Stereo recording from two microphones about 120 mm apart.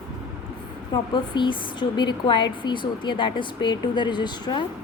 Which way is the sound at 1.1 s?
40° left (ahead or behind).